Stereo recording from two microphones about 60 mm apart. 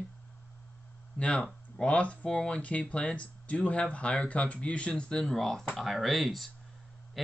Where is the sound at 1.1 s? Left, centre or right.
Left.